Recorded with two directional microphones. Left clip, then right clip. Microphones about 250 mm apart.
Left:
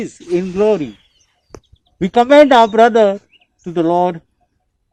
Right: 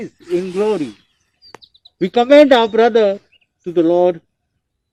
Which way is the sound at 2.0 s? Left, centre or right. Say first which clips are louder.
Left 1 dB; left.